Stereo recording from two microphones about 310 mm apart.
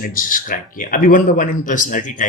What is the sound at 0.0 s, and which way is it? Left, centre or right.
Speech, left.